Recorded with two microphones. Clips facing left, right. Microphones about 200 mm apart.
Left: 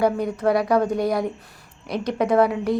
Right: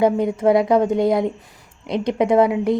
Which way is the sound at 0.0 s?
20° right (ahead or behind).